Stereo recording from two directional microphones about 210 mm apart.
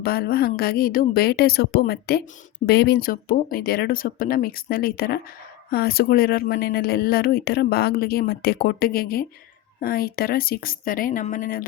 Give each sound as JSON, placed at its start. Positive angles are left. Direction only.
{"t": 0.0, "sound": "speech", "side_deg": 45}